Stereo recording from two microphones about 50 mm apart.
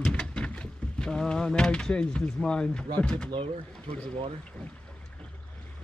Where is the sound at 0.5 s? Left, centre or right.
Centre.